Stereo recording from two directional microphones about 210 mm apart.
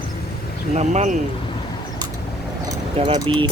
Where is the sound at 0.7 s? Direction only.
35° right (ahead or behind).